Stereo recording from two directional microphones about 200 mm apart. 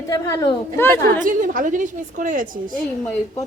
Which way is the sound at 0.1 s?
15° left (ahead or behind).